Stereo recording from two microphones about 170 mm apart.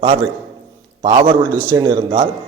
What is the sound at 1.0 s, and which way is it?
A man's voice, 30° right (ahead or behind).